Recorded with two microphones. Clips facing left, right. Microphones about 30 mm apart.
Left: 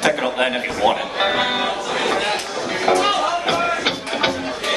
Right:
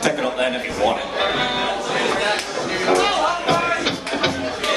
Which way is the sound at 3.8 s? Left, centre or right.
Centre.